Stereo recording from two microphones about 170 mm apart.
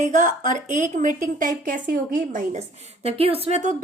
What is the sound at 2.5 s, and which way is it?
A woman's voice, 40° right (ahead or behind).